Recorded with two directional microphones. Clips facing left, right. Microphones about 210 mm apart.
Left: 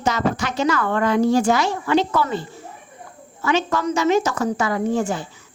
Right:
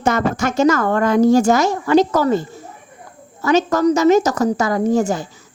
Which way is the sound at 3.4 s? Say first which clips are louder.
Right 6 dB; 40° right (ahead or behind).